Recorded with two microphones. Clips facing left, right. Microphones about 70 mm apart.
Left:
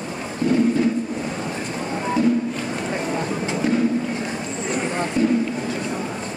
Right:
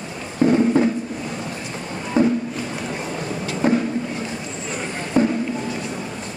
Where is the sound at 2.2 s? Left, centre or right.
Right.